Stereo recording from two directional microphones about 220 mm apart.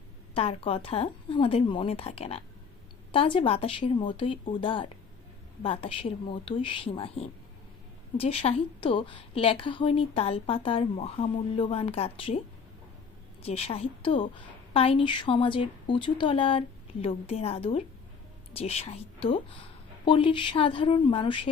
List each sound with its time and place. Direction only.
0.3 s a woman's voice: 25° left (ahead or behind)
13.4 s a woman's voice: 25° left (ahead or behind)